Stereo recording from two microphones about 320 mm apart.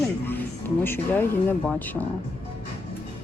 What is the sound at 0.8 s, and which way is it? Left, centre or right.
Speech, centre.